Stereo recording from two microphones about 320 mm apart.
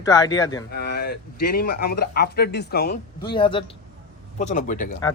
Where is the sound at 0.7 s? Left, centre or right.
Left.